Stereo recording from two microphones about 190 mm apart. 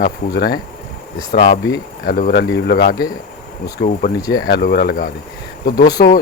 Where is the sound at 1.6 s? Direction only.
60° left (ahead or behind).